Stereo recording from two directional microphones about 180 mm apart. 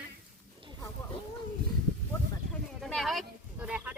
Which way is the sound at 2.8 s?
Centre (ahead or behind).